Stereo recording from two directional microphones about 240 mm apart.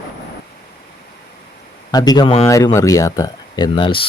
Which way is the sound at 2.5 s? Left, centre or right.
Centre.